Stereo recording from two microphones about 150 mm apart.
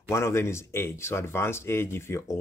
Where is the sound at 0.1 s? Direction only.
20° left (ahead or behind).